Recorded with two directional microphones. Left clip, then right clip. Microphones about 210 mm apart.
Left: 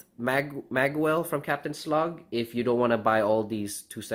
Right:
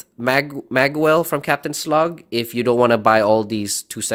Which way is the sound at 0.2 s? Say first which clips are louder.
Right 9 dB; 35° right (ahead or behind).